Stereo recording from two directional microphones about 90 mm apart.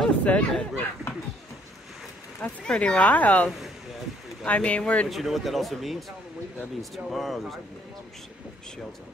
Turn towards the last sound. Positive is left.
turn(degrees=0)  # may be behind; listen again after turning